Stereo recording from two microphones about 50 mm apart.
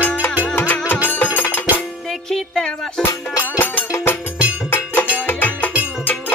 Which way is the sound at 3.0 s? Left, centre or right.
Left.